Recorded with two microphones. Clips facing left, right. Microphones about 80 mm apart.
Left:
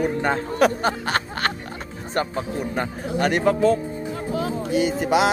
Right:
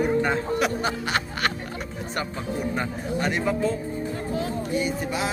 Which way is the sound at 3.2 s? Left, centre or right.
Left.